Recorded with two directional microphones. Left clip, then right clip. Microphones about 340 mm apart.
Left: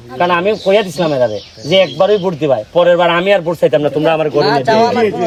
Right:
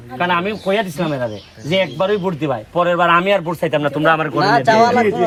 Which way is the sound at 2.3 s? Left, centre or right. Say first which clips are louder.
Left 8 dB; centre.